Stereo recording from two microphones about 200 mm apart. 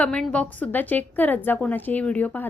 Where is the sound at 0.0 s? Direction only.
5° left (ahead or behind).